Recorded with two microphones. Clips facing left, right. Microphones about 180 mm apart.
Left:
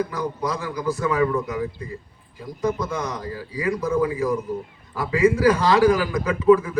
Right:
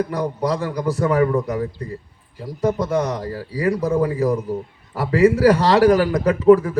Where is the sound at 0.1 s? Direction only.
35° right (ahead or behind).